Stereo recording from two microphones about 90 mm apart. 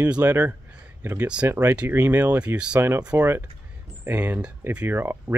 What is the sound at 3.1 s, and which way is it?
Speech, 30° right (ahead or behind).